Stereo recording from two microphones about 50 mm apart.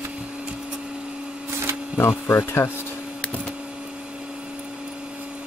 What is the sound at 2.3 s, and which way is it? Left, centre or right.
Speech, left.